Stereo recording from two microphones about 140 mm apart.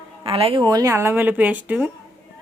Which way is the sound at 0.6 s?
25° right (ahead or behind).